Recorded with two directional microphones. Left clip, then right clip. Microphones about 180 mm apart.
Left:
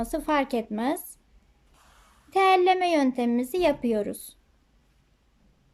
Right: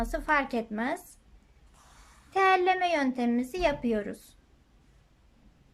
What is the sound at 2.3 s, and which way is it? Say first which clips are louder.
A child's voice: left 4 dB; 15° left (ahead or behind).